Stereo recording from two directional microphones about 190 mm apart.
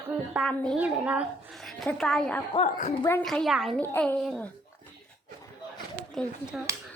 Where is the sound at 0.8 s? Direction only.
5° right (ahead or behind).